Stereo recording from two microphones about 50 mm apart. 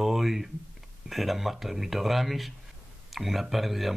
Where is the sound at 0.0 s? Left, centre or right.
Centre.